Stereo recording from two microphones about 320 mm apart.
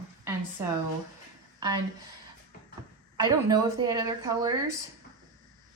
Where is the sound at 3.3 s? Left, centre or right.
Centre.